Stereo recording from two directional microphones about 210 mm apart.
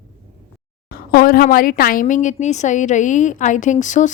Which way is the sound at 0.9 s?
45° left (ahead or behind).